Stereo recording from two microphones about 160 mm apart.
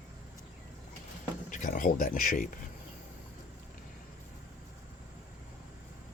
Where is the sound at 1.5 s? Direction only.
50° left (ahead or behind).